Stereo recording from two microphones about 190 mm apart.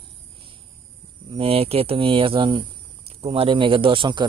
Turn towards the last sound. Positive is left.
turn(degrees=-25)  # may be behind; listen again after turning